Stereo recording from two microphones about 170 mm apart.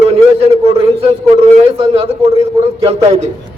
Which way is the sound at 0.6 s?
35° right (ahead or behind).